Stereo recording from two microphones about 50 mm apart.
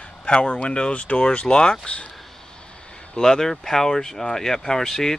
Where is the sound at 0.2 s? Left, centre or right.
Left.